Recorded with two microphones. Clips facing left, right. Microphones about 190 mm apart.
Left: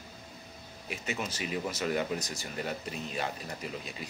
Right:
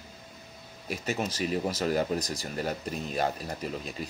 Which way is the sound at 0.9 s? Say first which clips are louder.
Right 5 dB; 40° right (ahead or behind).